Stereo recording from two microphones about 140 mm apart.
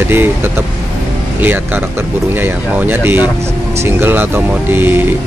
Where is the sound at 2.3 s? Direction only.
15° right (ahead or behind).